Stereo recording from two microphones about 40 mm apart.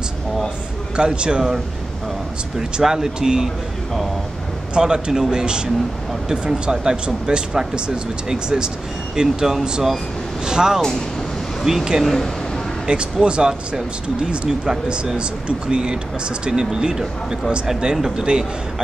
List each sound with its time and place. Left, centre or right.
0.9 s speech: right
2.8 s speech: centre
4.7 s speech: right
12.0 s speech: centre
12.8 s speech: right